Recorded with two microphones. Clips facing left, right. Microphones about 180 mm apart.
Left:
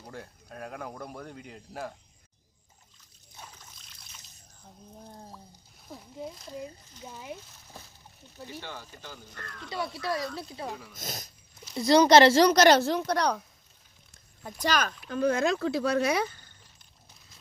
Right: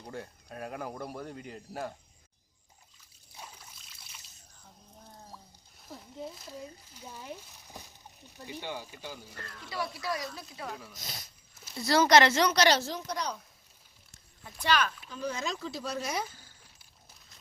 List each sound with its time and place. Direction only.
0.0 s speech: 5° right (ahead or behind)
3.3 s trickle: 10° right (ahead or behind)
6.2 s speech: centre (ahead or behind)
7.0 s speech: 10° left (ahead or behind)
7.3 s a sound: 15° right (ahead or behind)
8.4 s speech: 15° right (ahead or behind)
9.6 s a woman's voice: 25° left (ahead or behind)
10.7 s speech: centre (ahead or behind)
10.9 s speech: 45° left (ahead or behind)
11.8 s a woman's voice: 20° left (ahead or behind); by 12.6 s 35° left (ahead or behind)
12.6 s speech: 60° left (ahead or behind)
14.6 s speech: 40° left (ahead or behind)
15.1 s speech: 55° left (ahead or behind)
16.4 s a sound: 5° right (ahead or behind)